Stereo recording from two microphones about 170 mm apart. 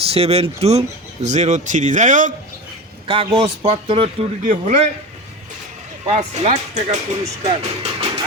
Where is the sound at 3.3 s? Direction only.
35° right (ahead or behind).